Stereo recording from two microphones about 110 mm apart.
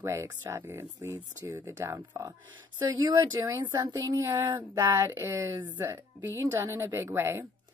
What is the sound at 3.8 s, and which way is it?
A woman's voice, 30° right (ahead or behind).